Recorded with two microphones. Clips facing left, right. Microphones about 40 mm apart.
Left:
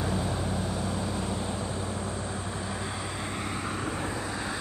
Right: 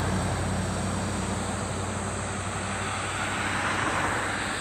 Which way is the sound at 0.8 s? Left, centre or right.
Centre.